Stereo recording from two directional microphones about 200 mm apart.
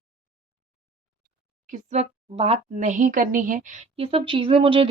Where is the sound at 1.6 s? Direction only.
35° right (ahead or behind).